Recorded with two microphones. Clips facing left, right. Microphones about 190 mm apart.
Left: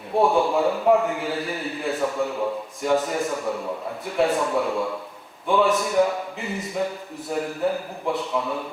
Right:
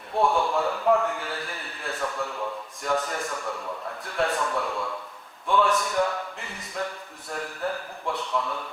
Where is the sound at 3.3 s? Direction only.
20° left (ahead or behind).